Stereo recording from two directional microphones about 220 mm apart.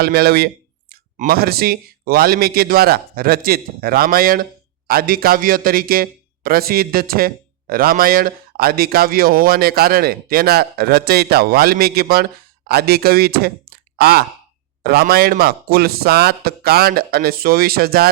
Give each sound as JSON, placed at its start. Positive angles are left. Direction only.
{"t": 0.0, "sound": "a man's voice", "side_deg": -45}